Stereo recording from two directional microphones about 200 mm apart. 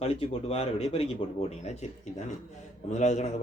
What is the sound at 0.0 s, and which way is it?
Speech, 30° left (ahead or behind).